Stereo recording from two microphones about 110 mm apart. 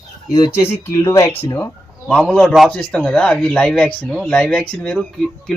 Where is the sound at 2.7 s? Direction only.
10° left (ahead or behind).